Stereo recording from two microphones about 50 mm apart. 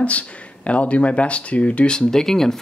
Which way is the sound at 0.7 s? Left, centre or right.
Left.